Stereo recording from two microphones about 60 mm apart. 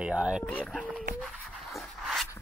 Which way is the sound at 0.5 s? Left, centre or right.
Left.